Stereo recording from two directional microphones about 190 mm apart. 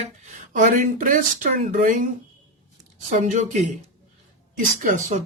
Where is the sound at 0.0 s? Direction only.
40° right (ahead or behind).